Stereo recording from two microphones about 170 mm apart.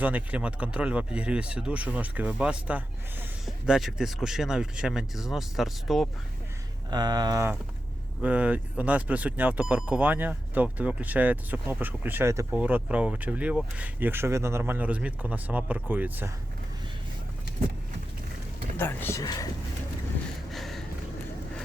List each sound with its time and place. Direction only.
0.0 s speech: 10° right (ahead or behind)
6.9 s speech: 25° right (ahead or behind)
18.8 s speech: 15° left (ahead or behind)
20.5 s a sound: centre (ahead or behind)